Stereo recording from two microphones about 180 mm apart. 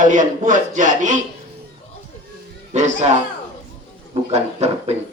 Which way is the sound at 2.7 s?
40° right (ahead or behind).